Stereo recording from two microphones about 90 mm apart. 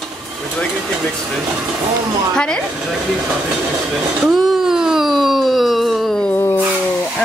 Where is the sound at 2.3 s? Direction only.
10° left (ahead or behind).